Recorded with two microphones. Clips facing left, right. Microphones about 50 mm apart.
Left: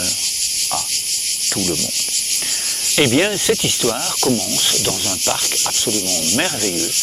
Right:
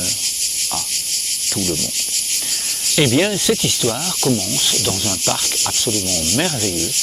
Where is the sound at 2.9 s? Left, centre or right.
Centre.